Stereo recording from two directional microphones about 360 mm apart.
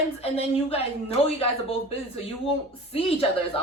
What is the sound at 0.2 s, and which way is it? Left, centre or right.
A woman's voice, centre.